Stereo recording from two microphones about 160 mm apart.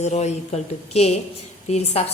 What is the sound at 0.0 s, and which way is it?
A woman's voice, 45° left (ahead or behind).